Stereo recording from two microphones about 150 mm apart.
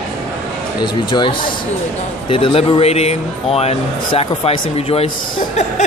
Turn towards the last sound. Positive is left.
turn(degrees=40)  # may be behind; listen again after turning